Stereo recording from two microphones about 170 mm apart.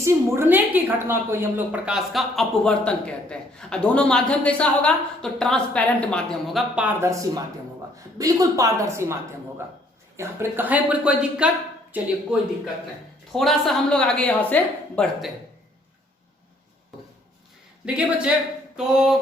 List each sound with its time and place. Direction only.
0.0 s a woman's voice: 15° right (ahead or behind)
10.2 s a woman's voice: 10° right (ahead or behind); by 15.0 s 10° left (ahead or behind)
17.8 s a woman's voice: 5° right (ahead or behind)